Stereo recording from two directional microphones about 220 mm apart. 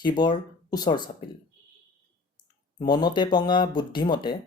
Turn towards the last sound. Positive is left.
turn(degrees=20)  # may be behind; listen again after turning